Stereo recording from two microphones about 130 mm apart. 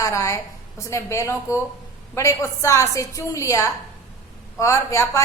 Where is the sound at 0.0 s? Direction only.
25° left (ahead or behind).